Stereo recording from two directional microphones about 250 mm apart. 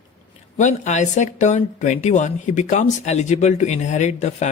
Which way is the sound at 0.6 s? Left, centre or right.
Left.